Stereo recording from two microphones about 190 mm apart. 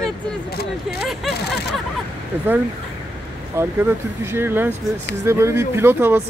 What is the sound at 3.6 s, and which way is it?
Speech, 10° right (ahead or behind).